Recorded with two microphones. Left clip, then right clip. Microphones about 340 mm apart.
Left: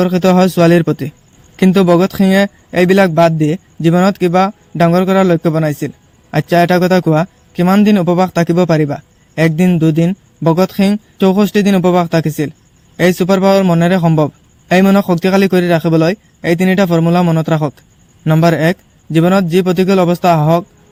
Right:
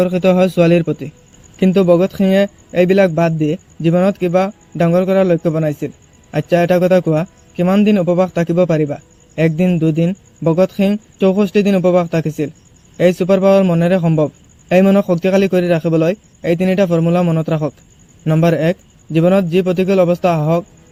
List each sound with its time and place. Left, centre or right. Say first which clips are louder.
0.0 s a man's voice: left 1 dB; left